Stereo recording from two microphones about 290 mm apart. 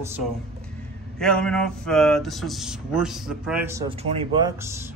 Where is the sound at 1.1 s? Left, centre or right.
Centre.